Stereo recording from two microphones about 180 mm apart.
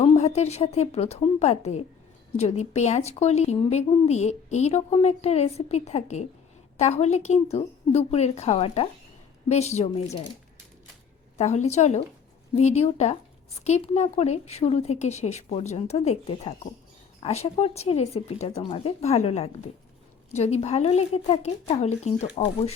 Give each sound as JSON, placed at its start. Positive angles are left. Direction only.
{"t": 0.0, "sound": "a woman's voice", "side_deg": 35}
{"t": 11.3, "sound": "a woman's voice", "side_deg": 35}